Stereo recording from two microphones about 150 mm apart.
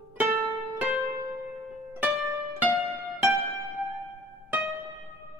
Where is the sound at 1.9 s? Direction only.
15° right (ahead or behind).